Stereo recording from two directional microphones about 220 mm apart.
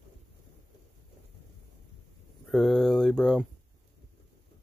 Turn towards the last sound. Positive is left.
turn(degrees=0)  # may be behind; listen again after turning